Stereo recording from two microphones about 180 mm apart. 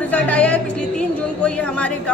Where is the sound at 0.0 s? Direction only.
10° left (ahead or behind).